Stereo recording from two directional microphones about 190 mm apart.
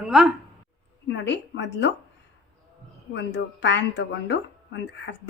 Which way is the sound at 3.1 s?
70° left (ahead or behind).